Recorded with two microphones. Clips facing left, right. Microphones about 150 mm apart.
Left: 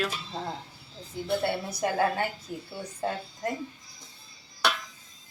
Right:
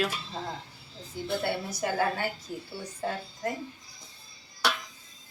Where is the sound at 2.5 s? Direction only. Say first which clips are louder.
Even; 20° left (ahead or behind).